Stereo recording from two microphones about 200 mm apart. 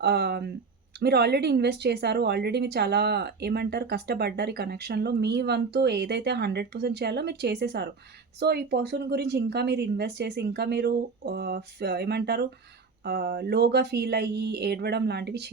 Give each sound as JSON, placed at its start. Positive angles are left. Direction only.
{"t": 0.0, "sound": "speech", "side_deg": -55}